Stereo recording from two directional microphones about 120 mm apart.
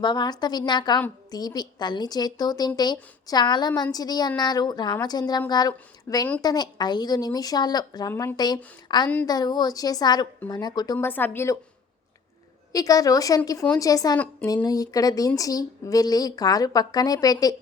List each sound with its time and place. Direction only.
0.0 s a woman's voice: 35° left (ahead or behind)
8.1 s speech: 15° left (ahead or behind)
8.4 s a woman's voice: 35° left (ahead or behind)
10.9 s speech: 15° left (ahead or behind)
12.7 s a woman's voice: 30° left (ahead or behind)